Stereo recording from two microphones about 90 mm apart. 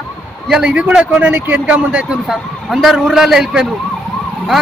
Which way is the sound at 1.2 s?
20° right (ahead or behind).